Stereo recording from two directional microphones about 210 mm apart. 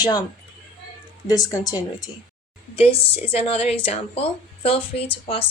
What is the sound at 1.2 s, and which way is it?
Speech, 15° left (ahead or behind).